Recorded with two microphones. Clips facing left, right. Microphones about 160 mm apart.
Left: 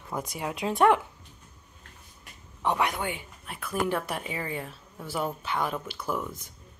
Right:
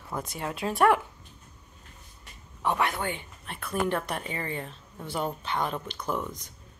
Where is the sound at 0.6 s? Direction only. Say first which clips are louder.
Left 1 dB; 20° left (ahead or behind).